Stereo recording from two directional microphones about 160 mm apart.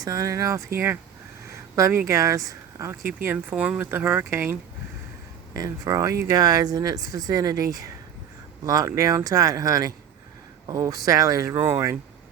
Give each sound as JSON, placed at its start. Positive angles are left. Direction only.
{"t": 0.0, "sound": "speech", "side_deg": -20}
{"t": 1.7, "sound": "speech", "side_deg": -15}
{"t": 5.5, "sound": "speech", "side_deg": -20}